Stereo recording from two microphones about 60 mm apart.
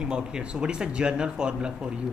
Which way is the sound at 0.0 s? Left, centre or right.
Centre.